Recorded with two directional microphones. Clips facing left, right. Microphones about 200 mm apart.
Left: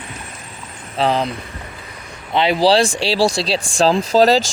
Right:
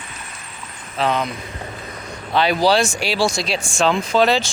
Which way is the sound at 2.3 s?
25° left (ahead or behind).